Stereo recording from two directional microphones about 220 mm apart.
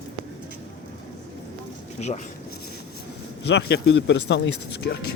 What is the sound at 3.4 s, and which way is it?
Speech, 50° left (ahead or behind).